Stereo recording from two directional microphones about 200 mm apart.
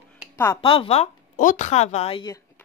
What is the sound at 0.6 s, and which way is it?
A woman's voice, 30° left (ahead or behind).